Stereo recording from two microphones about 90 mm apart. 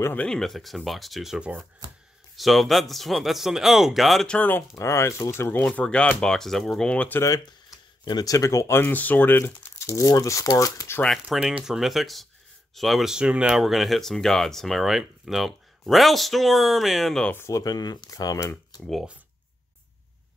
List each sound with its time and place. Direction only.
0.0 s speech: 20° left (ahead or behind)
0.3 s speech: centre (ahead or behind)
4.4 s speech: 20° left (ahead or behind)
4.7 s speech: 30° left (ahead or behind)
5.7 s speech: 10° left (ahead or behind)
6.9 s speech: 15° left (ahead or behind)
7.2 s speech: 45° left (ahead or behind); by 9.7 s 20° left (ahead or behind)
9.7 s speech: 35° left (ahead or behind)
11.2 s speech: 5° right (ahead or behind)
17.3 s speech: 30° left (ahead or behind)